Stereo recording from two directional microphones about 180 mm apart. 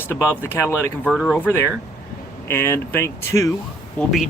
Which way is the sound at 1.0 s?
Centre (ahead or behind).